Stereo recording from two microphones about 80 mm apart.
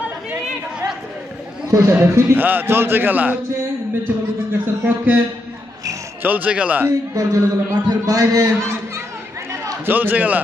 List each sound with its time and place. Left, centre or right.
1.7 s speech: right
2.0 s a man's voice: right
4.6 s a man's voice: right
6.2 s a man's voice: right
7.1 s a man's voice: right
9.8 s a man's voice: right